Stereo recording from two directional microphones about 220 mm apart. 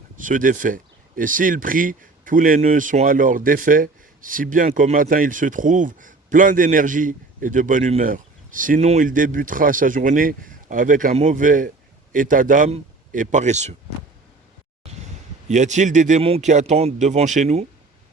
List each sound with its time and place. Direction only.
0.2 s speech: 35° right (ahead or behind)
15.4 s speech: 35° right (ahead or behind)